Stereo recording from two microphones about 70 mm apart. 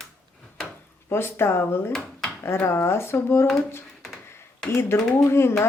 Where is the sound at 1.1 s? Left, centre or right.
Left.